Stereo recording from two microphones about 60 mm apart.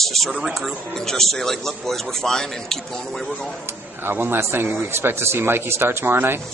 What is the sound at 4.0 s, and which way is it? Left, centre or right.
Speech, right.